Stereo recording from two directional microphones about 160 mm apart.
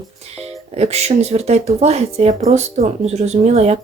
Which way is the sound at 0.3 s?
40° right (ahead or behind).